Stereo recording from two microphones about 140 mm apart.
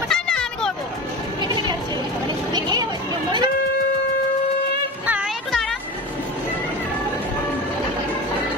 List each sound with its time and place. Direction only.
0.1 s children playing: 5° left (ahead or behind)
1.4 s a sound: 30° right (ahead or behind)
5.0 s music: 10° right (ahead or behind)
5.5 s music: 5° left (ahead or behind)